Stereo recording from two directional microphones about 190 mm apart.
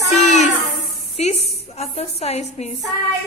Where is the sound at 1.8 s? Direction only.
35° left (ahead or behind).